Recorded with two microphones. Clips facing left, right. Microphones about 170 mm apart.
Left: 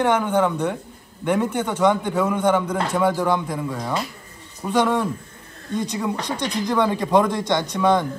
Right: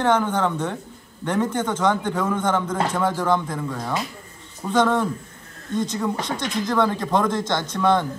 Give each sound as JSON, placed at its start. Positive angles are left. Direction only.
{"t": 0.0, "sound": "speech", "side_deg": 15}